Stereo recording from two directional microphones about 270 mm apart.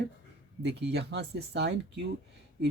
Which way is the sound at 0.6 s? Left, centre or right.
Right.